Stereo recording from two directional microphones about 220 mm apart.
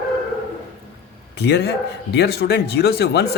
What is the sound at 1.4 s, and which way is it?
Speech, 50° left (ahead or behind).